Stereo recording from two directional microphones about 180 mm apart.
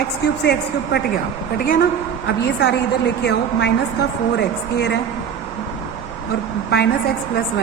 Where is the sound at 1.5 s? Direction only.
55° left (ahead or behind).